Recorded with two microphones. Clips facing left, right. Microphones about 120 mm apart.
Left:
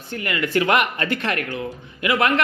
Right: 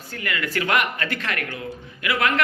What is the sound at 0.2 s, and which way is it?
Speech, 25° left (ahead or behind).